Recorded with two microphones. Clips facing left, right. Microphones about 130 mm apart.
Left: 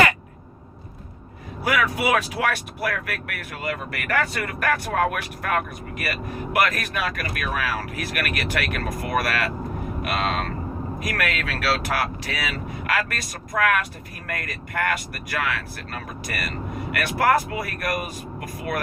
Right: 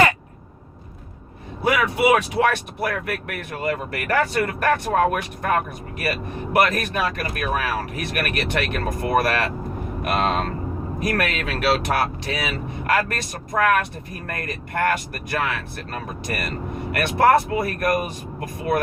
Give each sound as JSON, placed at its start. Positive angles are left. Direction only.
{"t": 1.6, "sound": "speech", "side_deg": -25}